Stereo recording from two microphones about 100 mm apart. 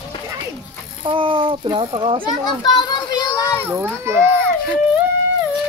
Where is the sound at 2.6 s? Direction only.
45° left (ahead or behind).